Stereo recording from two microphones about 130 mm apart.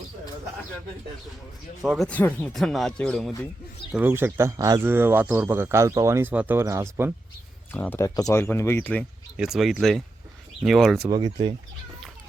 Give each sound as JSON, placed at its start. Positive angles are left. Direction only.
{"t": 1.8, "sound": "speech", "side_deg": 0}
{"t": 2.0, "sound": "speech", "side_deg": 10}
{"t": 3.9, "sound": "speech", "side_deg": -15}
{"t": 4.9, "sound": "speech", "side_deg": -15}
{"t": 7.7, "sound": "speech", "side_deg": 15}
{"t": 8.0, "sound": "speech", "side_deg": 25}
{"t": 9.4, "sound": "speech", "side_deg": 0}